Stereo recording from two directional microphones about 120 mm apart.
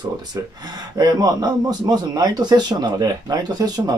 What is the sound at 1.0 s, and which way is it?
A man's voice, 35° right (ahead or behind).